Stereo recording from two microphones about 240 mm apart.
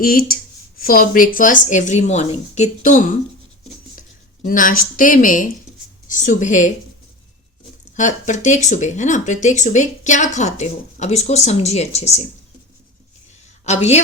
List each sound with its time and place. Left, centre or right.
0.0 s speech: left
4.4 s speech: left
7.9 s speech: left
13.7 s speech: left